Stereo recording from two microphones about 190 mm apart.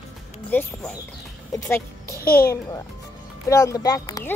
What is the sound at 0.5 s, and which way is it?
Speech, 10° left (ahead or behind).